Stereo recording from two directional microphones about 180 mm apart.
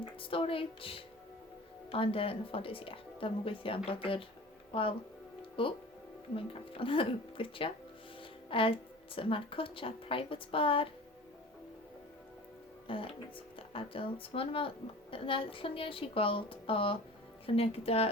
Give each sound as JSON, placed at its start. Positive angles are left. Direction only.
{"t": 0.2, "sound": "a woman's voice", "side_deg": 30}
{"t": 12.9, "sound": "a woman's voice", "side_deg": 30}